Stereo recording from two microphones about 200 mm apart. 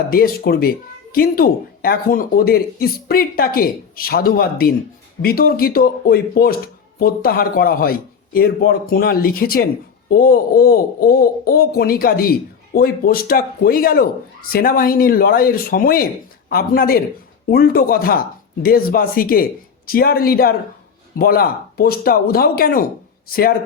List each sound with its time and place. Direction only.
0.1 s speech: 50° left (ahead or behind)